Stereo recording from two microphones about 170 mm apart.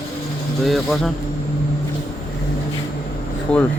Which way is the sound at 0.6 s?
Centre (ahead or behind).